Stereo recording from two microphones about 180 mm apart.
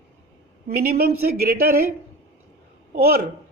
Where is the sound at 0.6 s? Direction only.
60° right (ahead or behind).